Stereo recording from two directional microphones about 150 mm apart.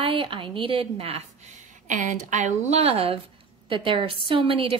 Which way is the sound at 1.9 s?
55° right (ahead or behind).